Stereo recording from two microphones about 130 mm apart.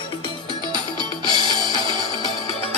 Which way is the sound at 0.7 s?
35° right (ahead or behind).